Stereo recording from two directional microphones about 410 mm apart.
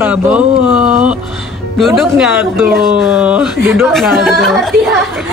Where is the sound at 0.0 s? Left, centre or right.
Centre.